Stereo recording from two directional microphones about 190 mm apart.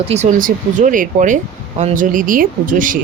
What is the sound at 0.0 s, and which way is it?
Speech, 35° right (ahead or behind).